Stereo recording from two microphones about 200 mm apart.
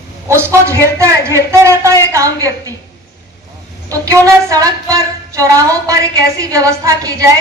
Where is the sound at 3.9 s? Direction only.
15° right (ahead or behind).